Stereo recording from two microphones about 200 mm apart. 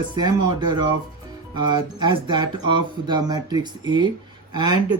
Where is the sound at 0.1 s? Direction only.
20° right (ahead or behind).